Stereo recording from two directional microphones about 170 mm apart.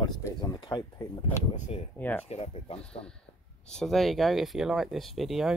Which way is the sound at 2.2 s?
35° left (ahead or behind).